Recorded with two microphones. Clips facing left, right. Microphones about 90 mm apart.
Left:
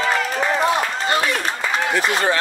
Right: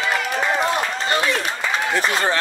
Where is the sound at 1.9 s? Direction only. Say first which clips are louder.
Left 1 dB; 35° right (ahead or behind).